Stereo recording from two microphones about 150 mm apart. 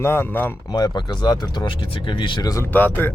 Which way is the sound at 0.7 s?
25° left (ahead or behind).